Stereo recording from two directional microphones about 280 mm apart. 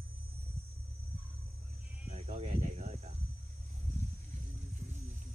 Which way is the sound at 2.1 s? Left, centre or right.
Right.